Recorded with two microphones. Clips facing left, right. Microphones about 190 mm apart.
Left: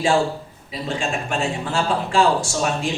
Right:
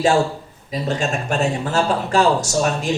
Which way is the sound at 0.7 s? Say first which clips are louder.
Right 3 dB; 40° right (ahead or behind).